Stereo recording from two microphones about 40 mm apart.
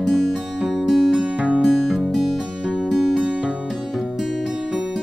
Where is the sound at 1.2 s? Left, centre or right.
Right.